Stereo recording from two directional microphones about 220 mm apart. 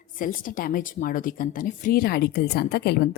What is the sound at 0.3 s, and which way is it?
Speech, 40° left (ahead or behind).